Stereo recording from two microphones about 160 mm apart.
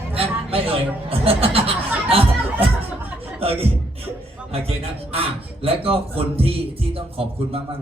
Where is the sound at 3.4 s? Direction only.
35° right (ahead or behind).